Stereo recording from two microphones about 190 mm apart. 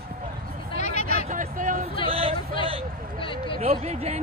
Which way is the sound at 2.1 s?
30° right (ahead or behind).